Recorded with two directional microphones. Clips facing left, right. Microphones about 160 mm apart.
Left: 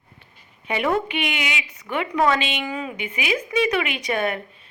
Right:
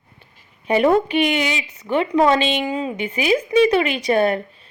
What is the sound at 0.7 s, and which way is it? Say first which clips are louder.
A woman's voice: right 7 dB; 35° right (ahead or behind).